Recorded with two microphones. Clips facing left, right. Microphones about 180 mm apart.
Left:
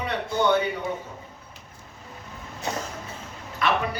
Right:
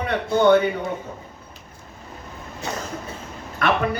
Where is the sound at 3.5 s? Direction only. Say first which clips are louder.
Right 4 dB; 55° right (ahead or behind).